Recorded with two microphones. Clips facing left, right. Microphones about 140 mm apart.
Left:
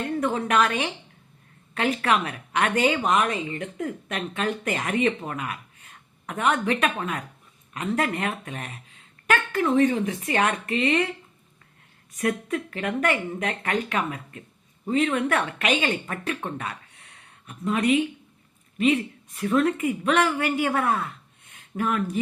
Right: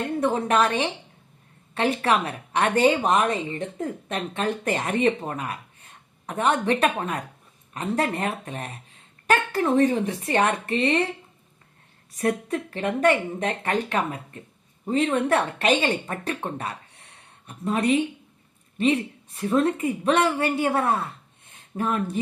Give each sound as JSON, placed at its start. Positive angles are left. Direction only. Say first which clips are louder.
{"t": 0.0, "sound": "a woman's voice", "louder": "right 2 dB", "side_deg": -30}
{"t": 12.1, "sound": "speech", "louder": "right 1 dB", "side_deg": -35}